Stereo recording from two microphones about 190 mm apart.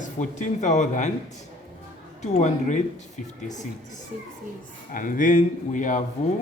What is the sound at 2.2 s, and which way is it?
Speech, 40° left (ahead or behind).